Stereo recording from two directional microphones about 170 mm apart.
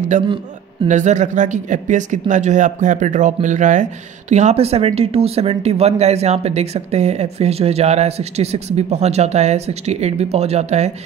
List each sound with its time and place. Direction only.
0.1 s speech: 45° right (ahead or behind)